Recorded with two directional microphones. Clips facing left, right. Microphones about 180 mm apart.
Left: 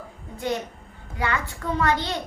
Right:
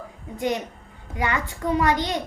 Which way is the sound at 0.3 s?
15° right (ahead or behind).